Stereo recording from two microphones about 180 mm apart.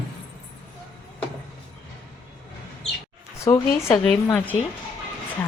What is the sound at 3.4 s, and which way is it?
Speech, 15° left (ahead or behind).